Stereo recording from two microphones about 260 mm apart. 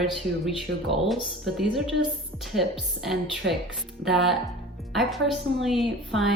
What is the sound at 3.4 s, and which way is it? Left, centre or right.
Speech, right.